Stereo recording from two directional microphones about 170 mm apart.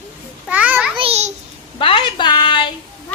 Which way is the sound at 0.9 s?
35° right (ahead or behind).